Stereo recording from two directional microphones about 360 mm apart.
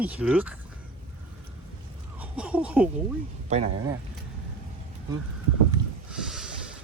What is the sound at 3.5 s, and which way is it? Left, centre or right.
Speech, centre.